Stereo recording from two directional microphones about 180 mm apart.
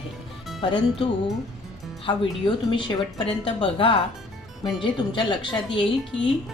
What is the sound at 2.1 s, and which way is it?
Speech, 25° left (ahead or behind).